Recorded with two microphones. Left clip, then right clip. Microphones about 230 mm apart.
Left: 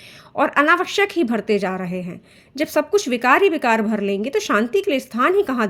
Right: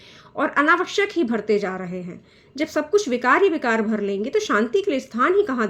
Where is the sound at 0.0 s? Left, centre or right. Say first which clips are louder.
Left 4 dB; left.